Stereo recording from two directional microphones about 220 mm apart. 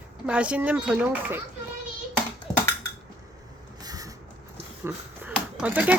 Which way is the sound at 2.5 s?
20° left (ahead or behind).